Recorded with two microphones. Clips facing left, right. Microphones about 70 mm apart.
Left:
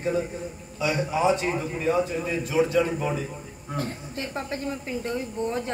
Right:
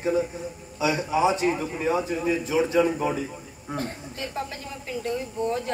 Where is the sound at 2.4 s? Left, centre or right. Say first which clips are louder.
Left 1 dB; right.